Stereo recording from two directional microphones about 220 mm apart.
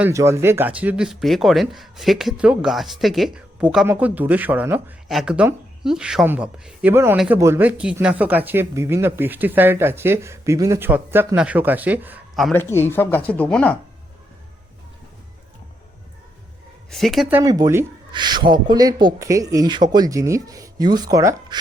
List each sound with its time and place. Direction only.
0.0 s speech: 15° right (ahead or behind); by 13.7 s 5° left (ahead or behind)
16.9 s speech: centre (ahead or behind); by 21.6 s 15° right (ahead or behind)